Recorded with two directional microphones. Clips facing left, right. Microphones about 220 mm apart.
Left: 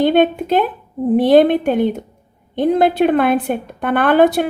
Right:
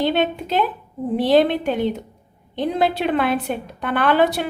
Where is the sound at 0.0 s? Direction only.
50° left (ahead or behind).